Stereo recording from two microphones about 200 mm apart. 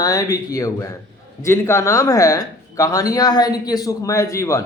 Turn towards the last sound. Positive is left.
turn(degrees=15)  # may be behind; listen again after turning